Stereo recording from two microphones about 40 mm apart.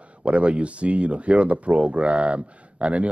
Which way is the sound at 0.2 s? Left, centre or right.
Right.